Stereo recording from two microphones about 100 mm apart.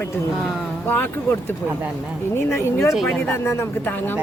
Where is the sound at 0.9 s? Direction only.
20° left (ahead or behind).